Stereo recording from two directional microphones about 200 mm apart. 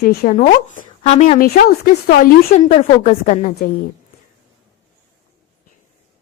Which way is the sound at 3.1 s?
40° left (ahead or behind).